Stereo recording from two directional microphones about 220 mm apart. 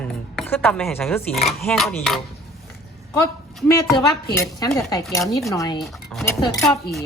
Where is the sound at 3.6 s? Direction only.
15° left (ahead or behind).